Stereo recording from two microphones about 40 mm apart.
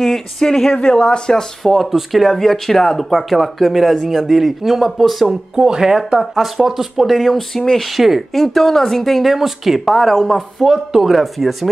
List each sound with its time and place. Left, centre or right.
0.0 s speech: centre
1.6 s speech: centre
2.3 s speech: centre
4.4 s speech: centre
8.5 s speech: centre
10.7 s speech: centre